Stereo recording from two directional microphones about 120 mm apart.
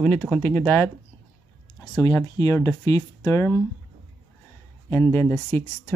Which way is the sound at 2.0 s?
30° left (ahead or behind).